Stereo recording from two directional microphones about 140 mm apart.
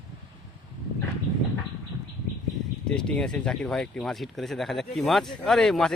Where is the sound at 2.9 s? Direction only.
5° left (ahead or behind).